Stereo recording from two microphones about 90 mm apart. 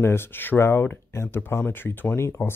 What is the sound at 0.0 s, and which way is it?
Speech, 25° left (ahead or behind).